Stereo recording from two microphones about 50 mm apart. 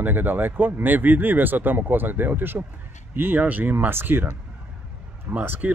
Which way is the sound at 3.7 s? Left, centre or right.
Right.